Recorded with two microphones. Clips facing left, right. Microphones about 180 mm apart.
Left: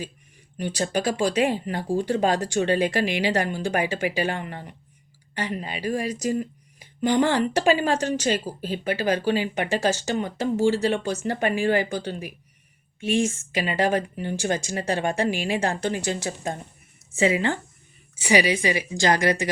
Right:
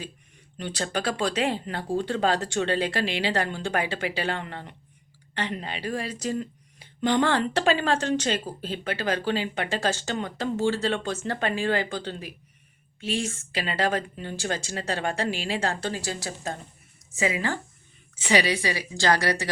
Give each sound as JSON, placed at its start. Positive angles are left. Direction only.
{"t": 0.5, "sound": "a woman's voice", "side_deg": 10}
{"t": 18.2, "sound": "a woman's voice", "side_deg": 15}